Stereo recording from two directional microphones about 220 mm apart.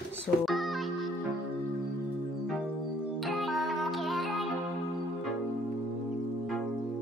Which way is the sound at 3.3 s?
Centre (ahead or behind).